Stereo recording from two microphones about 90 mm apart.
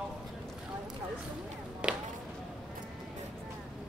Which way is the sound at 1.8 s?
10° right (ahead or behind).